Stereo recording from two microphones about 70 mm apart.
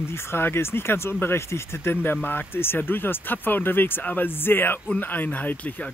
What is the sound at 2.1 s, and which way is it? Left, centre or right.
Speech, left.